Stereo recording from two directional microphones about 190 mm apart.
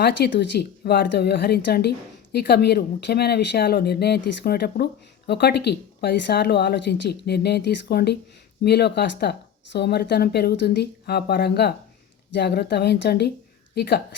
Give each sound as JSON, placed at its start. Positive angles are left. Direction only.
{"t": 0.0, "sound": "speech", "side_deg": 65}